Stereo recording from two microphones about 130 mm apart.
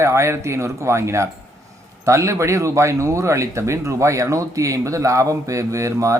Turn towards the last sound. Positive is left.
turn(degrees=-25)  # may be behind; listen again after turning